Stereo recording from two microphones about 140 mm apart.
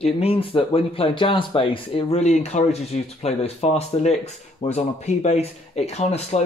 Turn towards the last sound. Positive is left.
turn(degrees=50)  # may be behind; listen again after turning